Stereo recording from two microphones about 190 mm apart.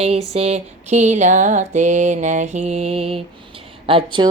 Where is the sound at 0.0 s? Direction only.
30° right (ahead or behind).